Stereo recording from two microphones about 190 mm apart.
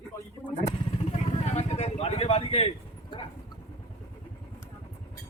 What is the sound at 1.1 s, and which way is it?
Vehicle, 35° left (ahead or behind).